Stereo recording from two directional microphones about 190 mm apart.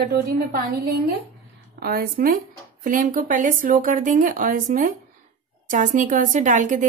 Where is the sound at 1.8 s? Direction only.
55° right (ahead or behind).